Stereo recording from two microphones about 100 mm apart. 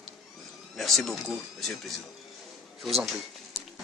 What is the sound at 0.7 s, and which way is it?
Speech, centre (ahead or behind).